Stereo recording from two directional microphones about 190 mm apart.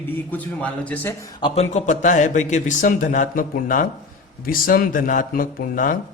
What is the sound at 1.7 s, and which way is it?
Speech, 40° left (ahead or behind).